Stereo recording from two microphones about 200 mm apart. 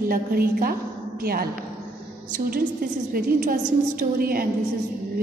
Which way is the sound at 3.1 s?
45° right (ahead or behind).